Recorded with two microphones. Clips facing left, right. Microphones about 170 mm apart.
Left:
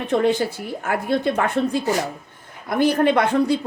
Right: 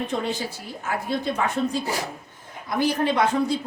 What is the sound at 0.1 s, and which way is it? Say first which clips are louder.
Speech: left 8 dB; 60° left (ahead or behind).